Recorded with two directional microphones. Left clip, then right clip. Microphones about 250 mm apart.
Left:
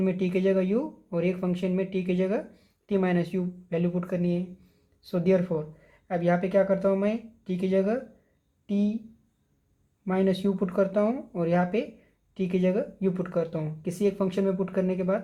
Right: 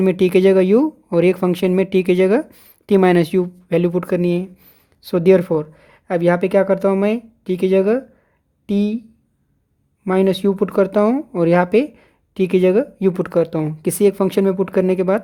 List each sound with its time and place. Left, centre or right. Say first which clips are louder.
0.0 s speech: right 13 dB; right
10.1 s speech: right 10 dB; right